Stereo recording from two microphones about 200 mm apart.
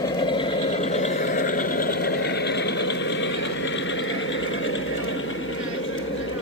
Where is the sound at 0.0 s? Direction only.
20° left (ahead or behind); by 5.2 s 80° left.